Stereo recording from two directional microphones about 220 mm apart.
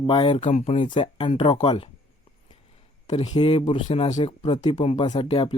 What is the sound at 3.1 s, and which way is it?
Speech, 25° left (ahead or behind).